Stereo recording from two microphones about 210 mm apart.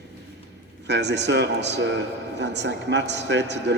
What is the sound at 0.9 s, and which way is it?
A man's voice, 55° right (ahead or behind).